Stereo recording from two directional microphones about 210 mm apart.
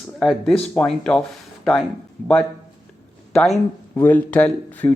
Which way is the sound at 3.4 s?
5° left (ahead or behind).